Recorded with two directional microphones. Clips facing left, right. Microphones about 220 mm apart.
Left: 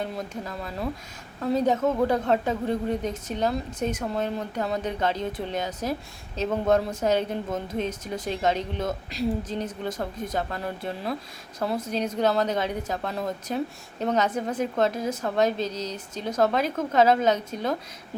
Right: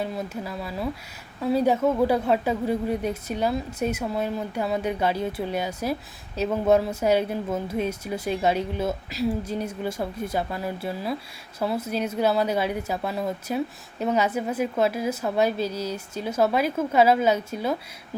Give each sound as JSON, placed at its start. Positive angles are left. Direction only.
{"t": 0.0, "sound": "speech", "side_deg": -5}